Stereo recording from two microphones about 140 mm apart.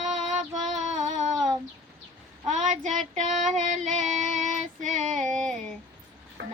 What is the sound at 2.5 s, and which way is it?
Child singing, 60° right (ahead or behind).